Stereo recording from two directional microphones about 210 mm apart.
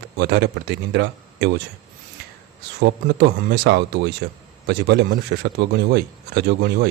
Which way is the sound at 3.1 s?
55° right (ahead or behind).